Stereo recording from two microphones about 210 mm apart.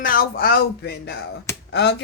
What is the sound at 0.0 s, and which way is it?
Speech, 45° left (ahead or behind).